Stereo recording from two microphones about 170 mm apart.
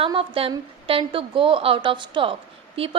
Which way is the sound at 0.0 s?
30° right (ahead or behind).